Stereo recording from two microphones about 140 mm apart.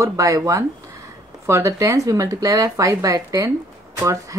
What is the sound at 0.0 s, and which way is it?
Speech, 25° right (ahead or behind).